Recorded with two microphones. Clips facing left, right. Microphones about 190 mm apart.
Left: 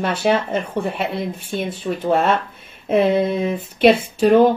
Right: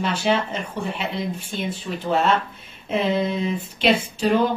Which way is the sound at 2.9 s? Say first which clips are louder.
Left 6 dB; 55° left (ahead or behind).